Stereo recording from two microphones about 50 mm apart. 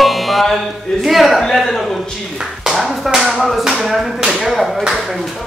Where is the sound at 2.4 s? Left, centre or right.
Centre.